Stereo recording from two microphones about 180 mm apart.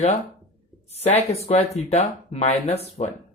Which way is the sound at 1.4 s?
35° left (ahead or behind).